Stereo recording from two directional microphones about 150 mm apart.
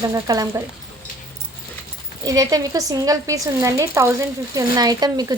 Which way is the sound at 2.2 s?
25° right (ahead or behind).